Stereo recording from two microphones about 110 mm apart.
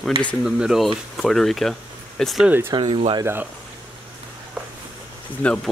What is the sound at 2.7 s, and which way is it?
Speech, 40° right (ahead or behind).